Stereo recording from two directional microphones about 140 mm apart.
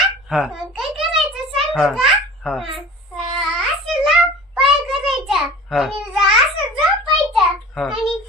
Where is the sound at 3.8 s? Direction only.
Centre (ahead or behind).